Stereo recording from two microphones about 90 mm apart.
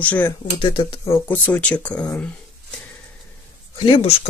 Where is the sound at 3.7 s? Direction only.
90° left.